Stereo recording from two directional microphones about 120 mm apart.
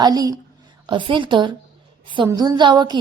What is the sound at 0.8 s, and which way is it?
Speech, 45° right (ahead or behind).